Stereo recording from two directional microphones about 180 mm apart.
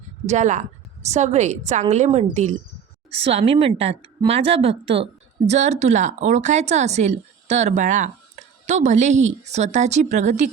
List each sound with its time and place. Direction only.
0.3 s speech: 40° right (ahead or behind)